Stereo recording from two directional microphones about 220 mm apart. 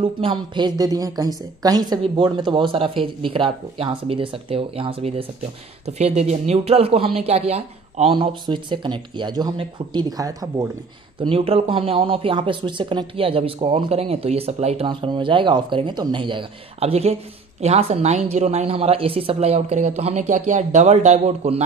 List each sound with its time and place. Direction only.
0.0 s speech: 25° right (ahead or behind)